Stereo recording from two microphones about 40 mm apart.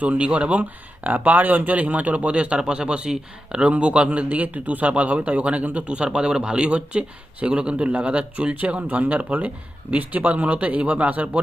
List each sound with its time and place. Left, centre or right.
0.0 s speech: right
6.1 s speech: centre; by 11.3 s right